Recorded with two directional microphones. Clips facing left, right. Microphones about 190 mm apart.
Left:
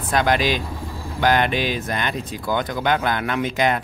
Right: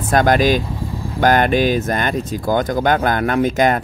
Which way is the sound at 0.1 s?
45° right (ahead or behind).